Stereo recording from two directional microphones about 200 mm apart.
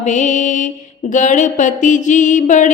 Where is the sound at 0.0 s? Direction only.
35° left (ahead or behind).